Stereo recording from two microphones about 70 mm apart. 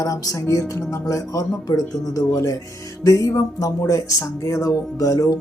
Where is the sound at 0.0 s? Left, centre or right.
Left.